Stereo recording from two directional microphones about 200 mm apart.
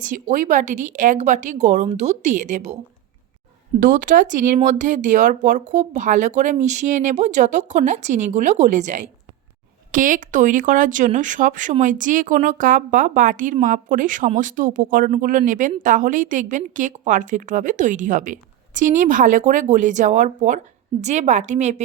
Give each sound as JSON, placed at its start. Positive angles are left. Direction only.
{"t": 0.0, "sound": "speech", "side_deg": -40}
{"t": 3.8, "sound": "speech", "side_deg": -40}